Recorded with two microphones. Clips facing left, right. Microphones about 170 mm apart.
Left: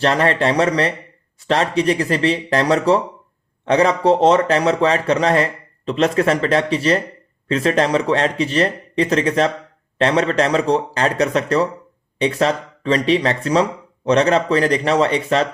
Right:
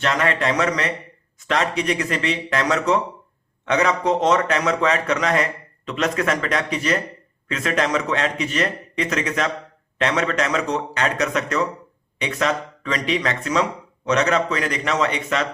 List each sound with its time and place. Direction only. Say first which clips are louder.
0.0 s speech: left 5 dB; 30° left (ahead or behind)